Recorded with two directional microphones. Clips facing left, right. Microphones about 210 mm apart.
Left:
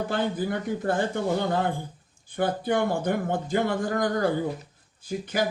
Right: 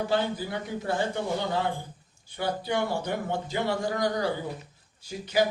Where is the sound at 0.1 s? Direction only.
50° left (ahead or behind).